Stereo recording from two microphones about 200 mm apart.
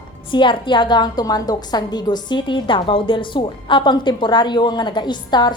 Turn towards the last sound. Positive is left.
turn(degrees=20)  # may be behind; listen again after turning